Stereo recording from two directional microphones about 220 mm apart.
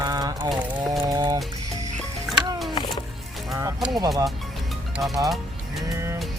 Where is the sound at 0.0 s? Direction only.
15° right (ahead or behind).